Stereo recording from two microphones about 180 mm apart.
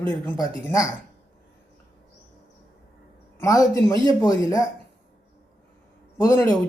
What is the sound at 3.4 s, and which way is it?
Speech, 20° left (ahead or behind).